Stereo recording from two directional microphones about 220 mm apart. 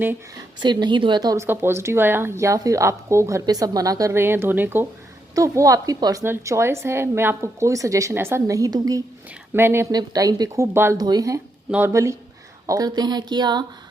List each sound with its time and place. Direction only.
0.6 s speech: 20° right (ahead or behind)